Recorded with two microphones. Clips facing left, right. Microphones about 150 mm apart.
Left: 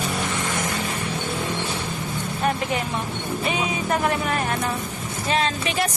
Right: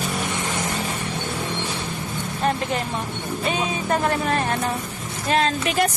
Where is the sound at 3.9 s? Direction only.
35° right (ahead or behind).